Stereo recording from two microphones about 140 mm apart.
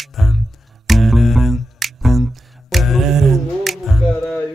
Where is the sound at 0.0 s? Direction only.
Centre (ahead or behind).